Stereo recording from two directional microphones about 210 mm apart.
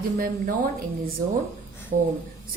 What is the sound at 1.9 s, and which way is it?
Speech, 55° right (ahead or behind).